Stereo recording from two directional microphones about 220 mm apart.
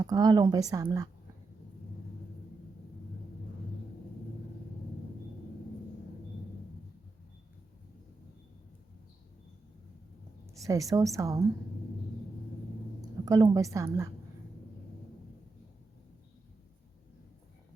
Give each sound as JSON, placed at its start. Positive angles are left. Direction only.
{"t": 0.0, "sound": "a woman's voice", "side_deg": -15}
{"t": 10.4, "sound": "a sound", "side_deg": -15}
{"t": 11.2, "sound": "a woman's voice", "side_deg": -15}
{"t": 13.2, "sound": "a woman's voice", "side_deg": -15}